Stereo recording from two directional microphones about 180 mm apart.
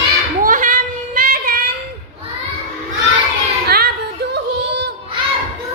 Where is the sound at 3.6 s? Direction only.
60° right (ahead or behind).